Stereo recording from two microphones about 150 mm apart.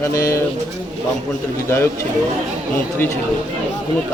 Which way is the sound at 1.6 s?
15° left (ahead or behind).